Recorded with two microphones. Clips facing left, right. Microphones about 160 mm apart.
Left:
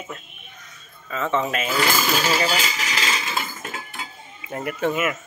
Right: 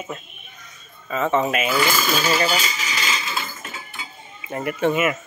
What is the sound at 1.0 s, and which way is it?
Speech, 15° right (ahead or behind).